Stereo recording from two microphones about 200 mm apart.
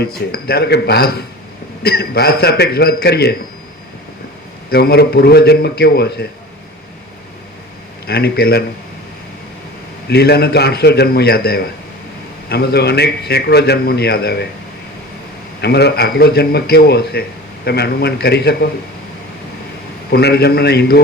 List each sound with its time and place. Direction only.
0.0 s a man's voice: 50° left (ahead or behind)
4.7 s a man's voice: 50° left (ahead or behind)
8.0 s a man's voice: 50° left (ahead or behind)
10.1 s a man's voice: 55° left (ahead or behind)
15.6 s a man's voice: 55° left (ahead or behind)
20.1 s a man's voice: 50° left (ahead or behind)